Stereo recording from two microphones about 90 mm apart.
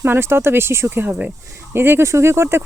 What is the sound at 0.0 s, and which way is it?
Speech, 25° right (ahead or behind).